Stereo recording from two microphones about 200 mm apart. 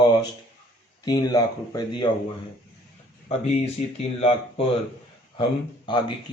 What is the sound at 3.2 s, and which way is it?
Speech, 30° left (ahead or behind).